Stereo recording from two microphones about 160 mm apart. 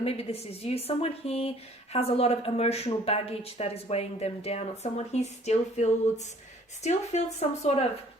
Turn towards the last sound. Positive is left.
turn(degrees=40)  # may be behind; listen again after turning